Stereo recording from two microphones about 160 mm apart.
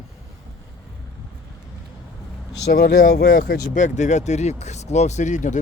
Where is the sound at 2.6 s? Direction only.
85° left.